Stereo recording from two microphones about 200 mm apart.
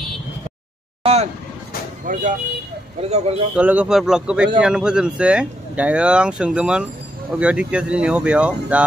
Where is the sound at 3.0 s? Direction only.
30° right (ahead or behind).